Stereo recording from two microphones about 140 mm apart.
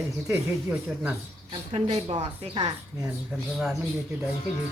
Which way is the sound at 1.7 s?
45° right (ahead or behind).